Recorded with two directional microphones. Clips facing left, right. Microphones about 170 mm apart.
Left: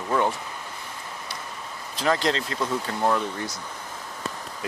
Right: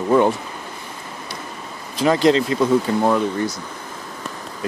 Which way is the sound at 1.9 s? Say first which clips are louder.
Right 8 dB; 15° right (ahead or behind).